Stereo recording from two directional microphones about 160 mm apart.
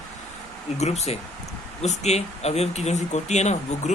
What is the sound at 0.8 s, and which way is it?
Speech, 45° left (ahead or behind).